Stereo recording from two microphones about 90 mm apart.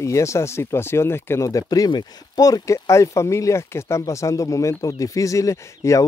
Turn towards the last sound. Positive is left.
turn(degrees=35)  # may be behind; listen again after turning